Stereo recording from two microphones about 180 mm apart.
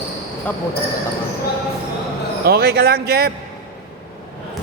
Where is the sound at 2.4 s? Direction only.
60° right (ahead or behind).